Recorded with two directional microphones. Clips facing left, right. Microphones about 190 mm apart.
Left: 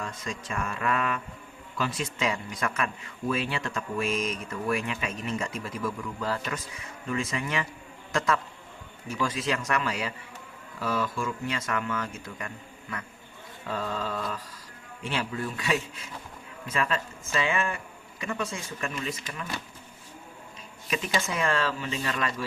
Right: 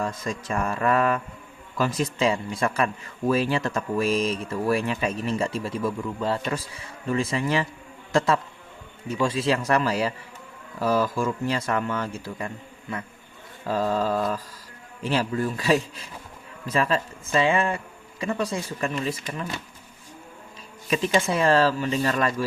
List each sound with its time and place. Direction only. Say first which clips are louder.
0.0 s speech: right 7 dB; 40° right (ahead or behind)
9.0 s speech: right 6 dB; 25° right (ahead or behind)
13.7 s speech: right 8 dB; 40° right (ahead or behind)
20.9 s speech: right 7 dB; 30° right (ahead or behind)